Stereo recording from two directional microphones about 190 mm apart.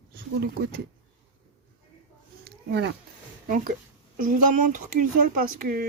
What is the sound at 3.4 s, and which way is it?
Speech, 45° right (ahead or behind).